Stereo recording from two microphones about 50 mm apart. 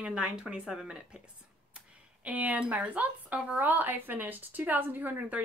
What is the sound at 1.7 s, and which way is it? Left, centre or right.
Speech, right.